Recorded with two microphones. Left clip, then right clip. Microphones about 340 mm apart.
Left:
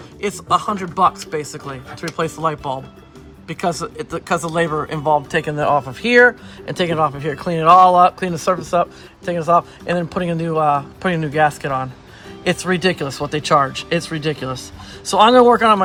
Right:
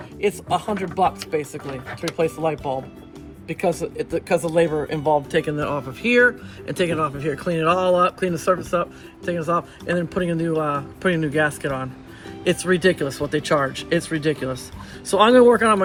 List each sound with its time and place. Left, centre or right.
0.2 s speech: left